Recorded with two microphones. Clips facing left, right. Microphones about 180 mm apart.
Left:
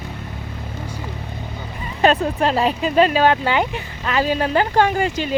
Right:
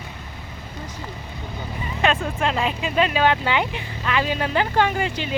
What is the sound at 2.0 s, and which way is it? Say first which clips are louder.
Speech: left 5 dB; 40° left (ahead or behind).